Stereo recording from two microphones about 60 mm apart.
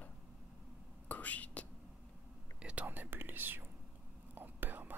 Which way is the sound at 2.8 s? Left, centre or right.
Right.